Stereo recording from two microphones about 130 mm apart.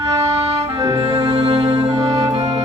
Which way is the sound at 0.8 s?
25° right (ahead or behind).